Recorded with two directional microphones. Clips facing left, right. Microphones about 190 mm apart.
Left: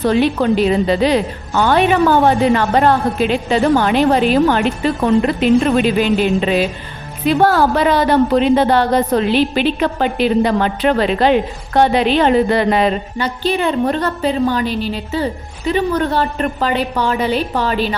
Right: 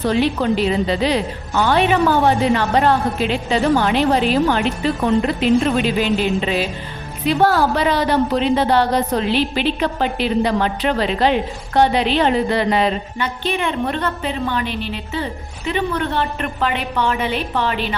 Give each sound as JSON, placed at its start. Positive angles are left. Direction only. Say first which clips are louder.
{"t": 0.1, "sound": "a woman's voice", "louder": "left 3 dB", "side_deg": 50}
{"t": 13.1, "sound": "a woman's voice", "louder": "left 4 dB", "side_deg": 35}